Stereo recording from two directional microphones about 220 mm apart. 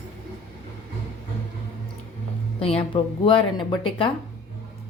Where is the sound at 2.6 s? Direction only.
25° left (ahead or behind).